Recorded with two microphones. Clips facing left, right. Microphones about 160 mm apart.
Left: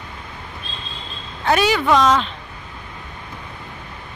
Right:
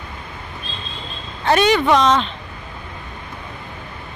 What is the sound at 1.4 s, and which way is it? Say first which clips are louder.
Speech: right 2 dB; 5° left (ahead or behind).